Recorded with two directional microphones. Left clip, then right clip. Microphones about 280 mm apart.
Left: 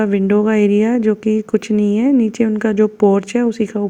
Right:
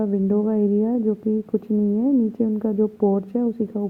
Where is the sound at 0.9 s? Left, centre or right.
Left.